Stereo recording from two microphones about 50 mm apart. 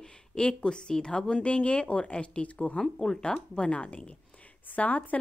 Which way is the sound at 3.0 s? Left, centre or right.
Centre.